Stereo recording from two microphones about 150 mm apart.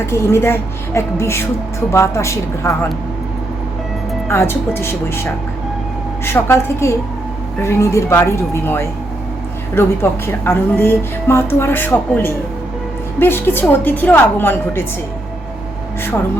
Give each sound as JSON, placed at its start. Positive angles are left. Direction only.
{"t": 0.0, "sound": "a woman's voice", "side_deg": 15}
{"t": 4.3, "sound": "a woman's voice", "side_deg": 15}